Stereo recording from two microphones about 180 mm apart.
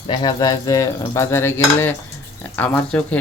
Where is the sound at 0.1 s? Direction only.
25° left (ahead or behind).